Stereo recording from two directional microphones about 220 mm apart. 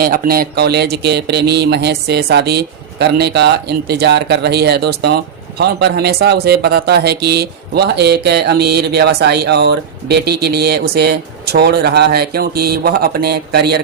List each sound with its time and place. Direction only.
0.0 s speech: 40° right (ahead or behind)